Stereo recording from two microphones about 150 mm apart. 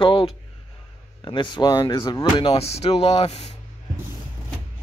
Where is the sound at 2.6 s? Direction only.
40° left (ahead or behind).